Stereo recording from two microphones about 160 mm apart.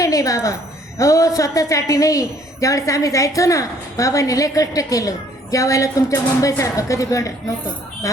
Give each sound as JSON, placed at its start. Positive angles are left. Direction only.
{"t": 0.0, "sound": "a woman's voice", "side_deg": 20}